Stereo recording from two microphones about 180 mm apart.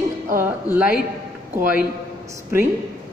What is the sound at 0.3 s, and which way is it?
Speech, 10° right (ahead or behind).